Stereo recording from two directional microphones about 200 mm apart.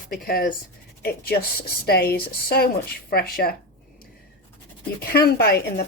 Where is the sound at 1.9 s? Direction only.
50° left (ahead or behind).